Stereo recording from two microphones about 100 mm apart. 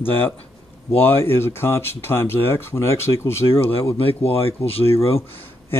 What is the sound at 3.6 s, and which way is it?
Speech, 75° left (ahead or behind).